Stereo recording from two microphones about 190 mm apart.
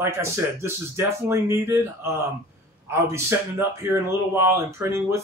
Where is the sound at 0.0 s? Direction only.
15° right (ahead or behind).